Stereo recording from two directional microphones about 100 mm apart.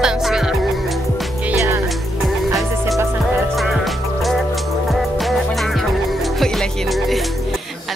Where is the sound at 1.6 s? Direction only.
30° right (ahead or behind).